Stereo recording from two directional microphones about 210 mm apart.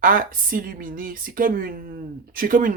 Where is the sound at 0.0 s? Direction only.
40° right (ahead or behind).